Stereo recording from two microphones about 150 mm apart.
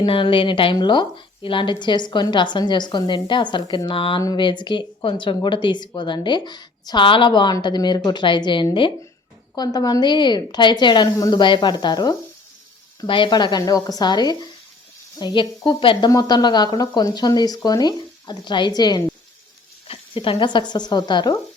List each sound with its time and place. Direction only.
0.0 s speech: 35° left (ahead or behind)